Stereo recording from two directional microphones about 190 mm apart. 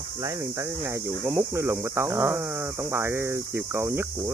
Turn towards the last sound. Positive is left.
turn(degrees=-15)  # may be behind; listen again after turning